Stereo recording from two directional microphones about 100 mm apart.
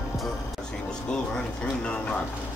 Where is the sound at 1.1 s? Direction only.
10° left (ahead or behind).